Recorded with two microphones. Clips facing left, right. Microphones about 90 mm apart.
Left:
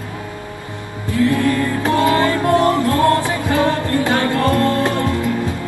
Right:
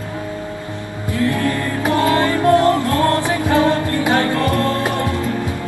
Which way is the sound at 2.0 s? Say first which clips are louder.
Left 1 dB; 20° left (ahead or behind).